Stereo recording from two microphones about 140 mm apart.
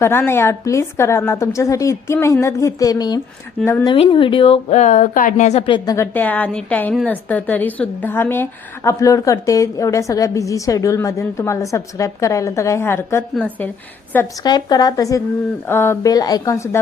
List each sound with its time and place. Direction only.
0.0 s a woman's voice: 15° left (ahead or behind)
3.8 s speech: 40° left (ahead or behind)
4.8 s a woman's voice: 60° left (ahead or behind)
5.6 s a woman's voice: 30° left (ahead or behind)
6.1 s a woman's voice: 10° left (ahead or behind)
14.4 s a woman's voice: 30° left (ahead or behind)